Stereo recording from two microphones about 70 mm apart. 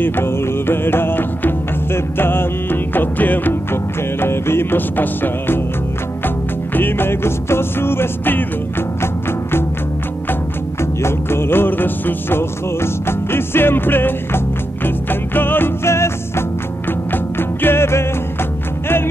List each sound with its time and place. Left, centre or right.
0.0 s music: left
10.8 s music: left